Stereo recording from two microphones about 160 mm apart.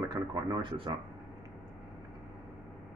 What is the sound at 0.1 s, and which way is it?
Speech, 25° right (ahead or behind).